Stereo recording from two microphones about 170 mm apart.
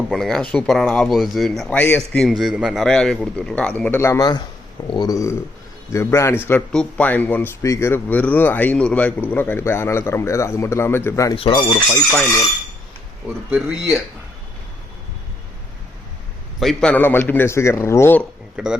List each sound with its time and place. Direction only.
0.1 s a man's voice: centre (ahead or behind); by 11.3 s 15° left (ahead or behind)
11.3 s speech: 30° left (ahead or behind)
13.5 s speech: 5° right (ahead or behind)
16.6 s a man's voice: 5° left (ahead or behind)
18.5 s a man's voice: 5° right (ahead or behind)